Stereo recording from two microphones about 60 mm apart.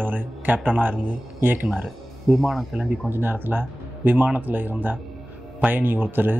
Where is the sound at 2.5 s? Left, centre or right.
Centre.